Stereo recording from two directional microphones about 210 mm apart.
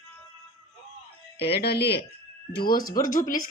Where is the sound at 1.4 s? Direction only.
50° left (ahead or behind).